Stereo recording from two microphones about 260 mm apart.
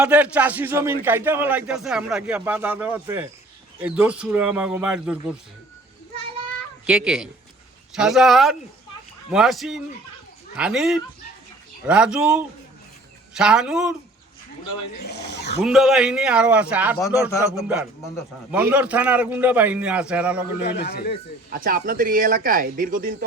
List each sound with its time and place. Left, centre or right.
0.0 s a man's voice: centre
6.8 s a man's voice: centre
14.9 s speech: left
15.6 s a man's voice: centre
20.8 s speech: left
21.5 s speech: right